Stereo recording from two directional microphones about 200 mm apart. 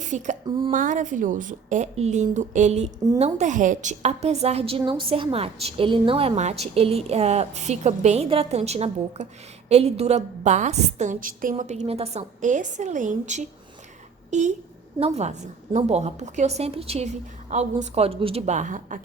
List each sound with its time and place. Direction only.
0.1 s a woman's voice: 40° right (ahead or behind)